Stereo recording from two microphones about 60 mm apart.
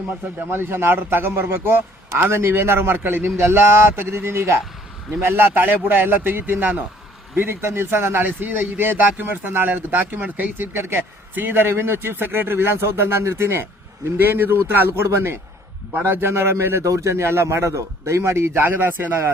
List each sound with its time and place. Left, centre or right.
0.3 s speech: right
1.3 s a man's voice: right
7.7 s speech: right
16.8 s a man's voice: right